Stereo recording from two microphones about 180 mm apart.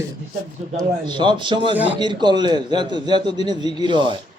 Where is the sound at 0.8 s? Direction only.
25° right (ahead or behind).